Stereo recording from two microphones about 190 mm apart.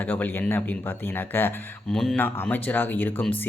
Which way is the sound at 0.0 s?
10° left (ahead or behind).